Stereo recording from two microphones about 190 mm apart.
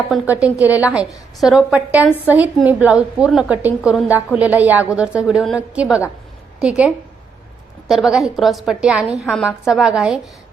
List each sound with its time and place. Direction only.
0.1 s a woman's voice: 5° right (ahead or behind)